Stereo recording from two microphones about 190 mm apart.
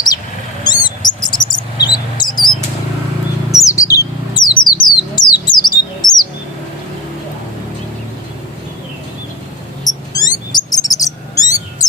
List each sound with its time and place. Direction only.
0.6 s mouse: 25° left (ahead or behind)
3.5 s bird: 15° left (ahead or behind)
9.8 s bird: 20° left (ahead or behind)